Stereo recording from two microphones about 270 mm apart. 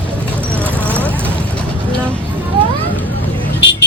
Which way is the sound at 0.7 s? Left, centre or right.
Centre.